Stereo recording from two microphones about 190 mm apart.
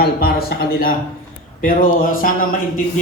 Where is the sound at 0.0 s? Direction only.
50° left (ahead or behind).